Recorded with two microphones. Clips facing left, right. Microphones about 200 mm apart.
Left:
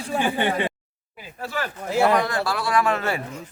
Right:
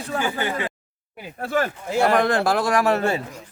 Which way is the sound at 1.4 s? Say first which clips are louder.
Right 5 dB; 50° right (ahead or behind).